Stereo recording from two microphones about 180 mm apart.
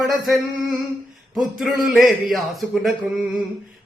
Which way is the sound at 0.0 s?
Centre (ahead or behind).